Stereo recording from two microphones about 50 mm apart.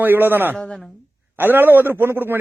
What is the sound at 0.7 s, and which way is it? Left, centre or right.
Speech, centre.